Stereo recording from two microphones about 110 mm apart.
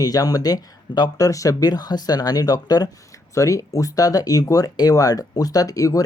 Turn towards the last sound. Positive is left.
turn(degrees=30)  # may be behind; listen again after turning